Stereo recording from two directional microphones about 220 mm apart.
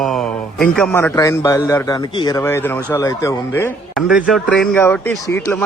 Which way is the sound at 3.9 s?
Centre (ahead or behind).